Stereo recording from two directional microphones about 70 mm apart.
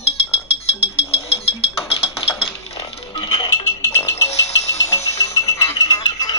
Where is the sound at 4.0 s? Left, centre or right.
Left.